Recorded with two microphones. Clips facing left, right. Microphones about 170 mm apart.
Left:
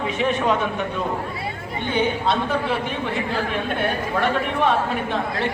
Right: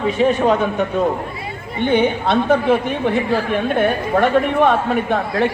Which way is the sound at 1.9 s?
60° right (ahead or behind).